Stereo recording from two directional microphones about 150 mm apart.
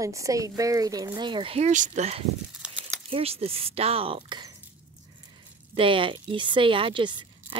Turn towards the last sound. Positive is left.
turn(degrees=-35)  # may be behind; listen again after turning